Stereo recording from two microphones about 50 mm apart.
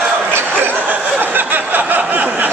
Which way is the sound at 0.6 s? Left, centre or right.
Right.